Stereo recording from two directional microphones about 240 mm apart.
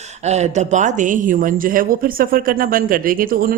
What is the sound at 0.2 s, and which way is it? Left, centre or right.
Speech, right.